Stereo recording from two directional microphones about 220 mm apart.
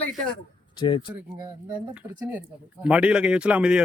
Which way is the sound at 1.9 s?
5° right (ahead or behind).